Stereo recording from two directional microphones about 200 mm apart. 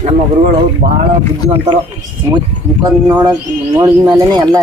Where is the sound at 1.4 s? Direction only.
30° right (ahead or behind).